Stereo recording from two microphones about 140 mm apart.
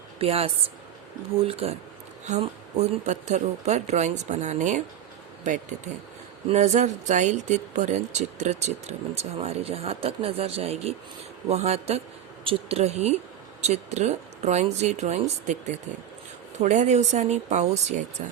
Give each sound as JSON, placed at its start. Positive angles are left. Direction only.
{"t": 0.2, "sound": "speech", "side_deg": -45}